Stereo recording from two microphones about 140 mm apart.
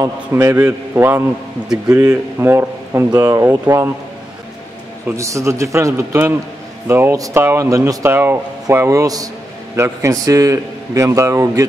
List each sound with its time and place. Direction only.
0.0 s a man's voice: 20° right (ahead or behind)
5.0 s speech: 20° right (ahead or behind)